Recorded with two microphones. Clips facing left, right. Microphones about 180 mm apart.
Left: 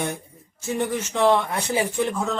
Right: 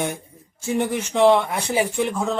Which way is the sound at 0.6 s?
15° right (ahead or behind).